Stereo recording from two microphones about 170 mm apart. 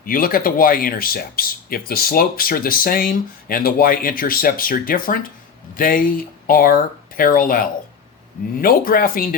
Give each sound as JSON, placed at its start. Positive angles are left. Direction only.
{"t": 0.0, "sound": "speech", "side_deg": 55}